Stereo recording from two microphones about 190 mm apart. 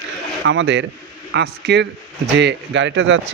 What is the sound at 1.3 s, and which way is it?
Speech, 60° right (ahead or behind).